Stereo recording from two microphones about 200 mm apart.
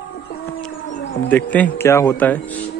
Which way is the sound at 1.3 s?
10° left (ahead or behind).